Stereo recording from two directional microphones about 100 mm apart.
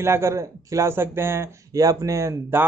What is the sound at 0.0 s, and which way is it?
A man's voice, 25° right (ahead or behind).